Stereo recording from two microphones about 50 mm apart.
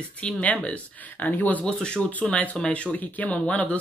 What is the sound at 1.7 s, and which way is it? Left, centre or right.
Speech, centre.